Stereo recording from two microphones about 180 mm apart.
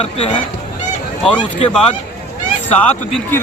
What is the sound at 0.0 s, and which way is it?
Speech, 35° left (ahead or behind).